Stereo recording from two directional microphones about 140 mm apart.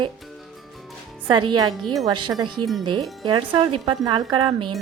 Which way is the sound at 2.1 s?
35° right (ahead or behind).